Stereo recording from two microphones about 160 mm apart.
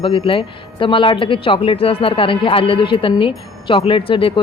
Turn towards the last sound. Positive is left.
turn(degrees=35)  # may be behind; listen again after turning